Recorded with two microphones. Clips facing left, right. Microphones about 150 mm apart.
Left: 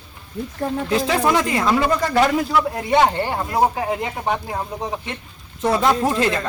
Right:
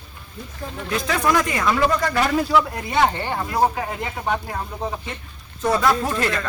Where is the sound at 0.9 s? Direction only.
30° left (ahead or behind).